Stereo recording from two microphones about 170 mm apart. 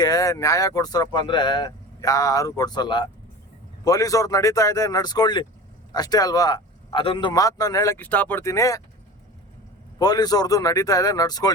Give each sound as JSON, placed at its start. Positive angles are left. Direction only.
{"t": 0.0, "sound": "speech", "side_deg": 20}
{"t": 10.0, "sound": "speech", "side_deg": 25}